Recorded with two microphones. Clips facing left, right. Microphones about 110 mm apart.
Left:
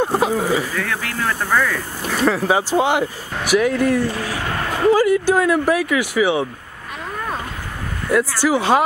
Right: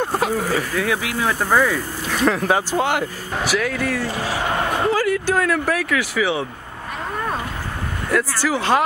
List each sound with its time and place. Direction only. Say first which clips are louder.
0.0 s a sound: left 3 dB; 10° left (ahead or behind)
0.7 s speech: right 2 dB; 10° right (ahead or behind)
2.1 s speech: left 1 dB; centre (ahead or behind)
4.1 s speech: right 2 dB; 20° right (ahead or behind)
4.9 s speech: left 4 dB; 15° left (ahead or behind)
8.1 s speech: left 4 dB; 15° left (ahead or behind)